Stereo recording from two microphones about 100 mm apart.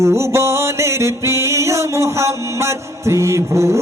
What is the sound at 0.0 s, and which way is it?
Music, 30° right (ahead or behind).